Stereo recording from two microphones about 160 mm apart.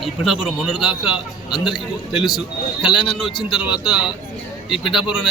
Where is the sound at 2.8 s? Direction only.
Centre (ahead or behind).